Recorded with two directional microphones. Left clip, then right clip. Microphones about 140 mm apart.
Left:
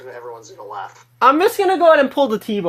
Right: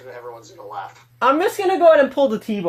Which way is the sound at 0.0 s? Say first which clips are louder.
Left 2 dB; 60° left (ahead or behind).